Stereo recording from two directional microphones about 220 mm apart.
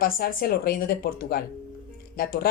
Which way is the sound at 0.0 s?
40° left (ahead or behind).